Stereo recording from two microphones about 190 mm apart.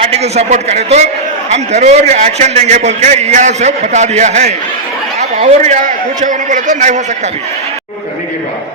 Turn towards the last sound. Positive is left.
turn(degrees=-40)  # may be behind; listen again after turning